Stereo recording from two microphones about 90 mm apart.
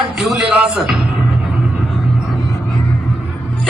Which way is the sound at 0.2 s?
10° right (ahead or behind).